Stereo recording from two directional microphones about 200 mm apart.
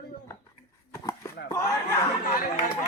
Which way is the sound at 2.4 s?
45° left (ahead or behind).